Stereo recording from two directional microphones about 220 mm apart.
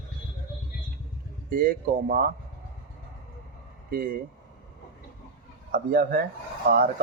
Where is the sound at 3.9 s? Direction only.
40° right (ahead or behind).